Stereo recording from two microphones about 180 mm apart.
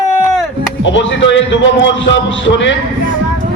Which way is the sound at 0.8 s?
90° left.